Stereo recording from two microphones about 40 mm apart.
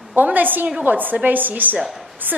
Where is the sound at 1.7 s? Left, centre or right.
Centre.